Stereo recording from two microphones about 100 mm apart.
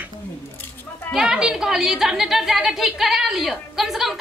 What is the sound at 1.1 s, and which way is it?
A woman's voice, 5° right (ahead or behind).